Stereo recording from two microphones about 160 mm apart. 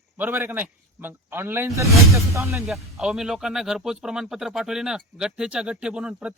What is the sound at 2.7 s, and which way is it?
Speech, 5° right (ahead or behind).